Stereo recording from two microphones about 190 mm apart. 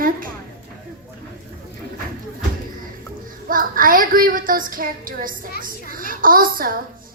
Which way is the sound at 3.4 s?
45° right (ahead or behind).